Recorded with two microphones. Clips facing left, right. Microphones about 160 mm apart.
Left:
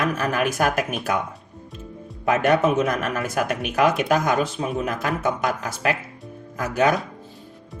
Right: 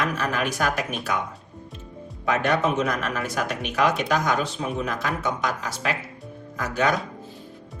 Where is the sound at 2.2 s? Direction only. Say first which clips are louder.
Left 4 dB; 55° left (ahead or behind).